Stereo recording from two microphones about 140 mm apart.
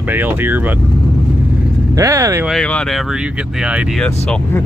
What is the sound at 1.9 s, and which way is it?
Speech, 20° right (ahead or behind).